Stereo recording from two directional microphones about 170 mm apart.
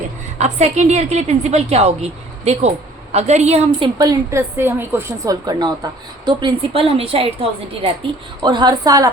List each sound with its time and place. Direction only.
0.3 s a woman's voice: 40° right (ahead or behind)
3.9 s a woman's voice: 20° right (ahead or behind)
8.4 s a woman's voice: 25° right (ahead or behind)